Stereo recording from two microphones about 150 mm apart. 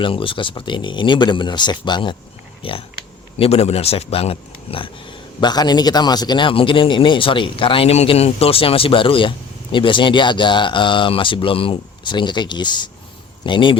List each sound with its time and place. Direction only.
0.0 s speech: 35° left (ahead or behind)